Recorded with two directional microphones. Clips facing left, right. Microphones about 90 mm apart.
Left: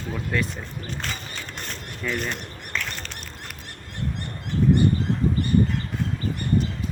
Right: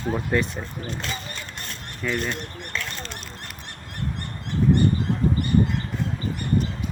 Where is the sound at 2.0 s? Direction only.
Centre (ahead or behind).